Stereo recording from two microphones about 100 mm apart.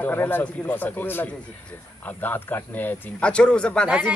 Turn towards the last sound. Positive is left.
turn(degrees=10)  # may be behind; listen again after turning